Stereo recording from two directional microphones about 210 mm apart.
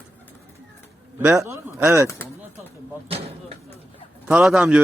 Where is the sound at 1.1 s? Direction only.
10° right (ahead or behind).